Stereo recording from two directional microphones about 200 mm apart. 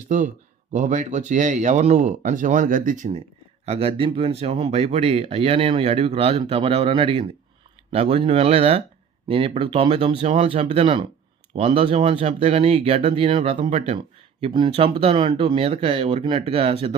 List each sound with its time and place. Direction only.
0.7 s speech: 40° right (ahead or behind)
3.7 s speech: 30° right (ahead or behind)